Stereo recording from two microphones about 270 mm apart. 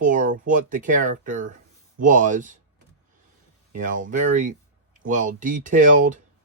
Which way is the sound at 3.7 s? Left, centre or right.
Right.